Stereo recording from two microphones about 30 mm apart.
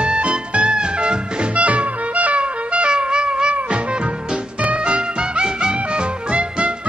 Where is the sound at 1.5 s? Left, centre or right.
Right.